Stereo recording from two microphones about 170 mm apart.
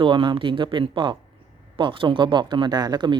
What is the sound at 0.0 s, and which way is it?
Speech, 30° right (ahead or behind).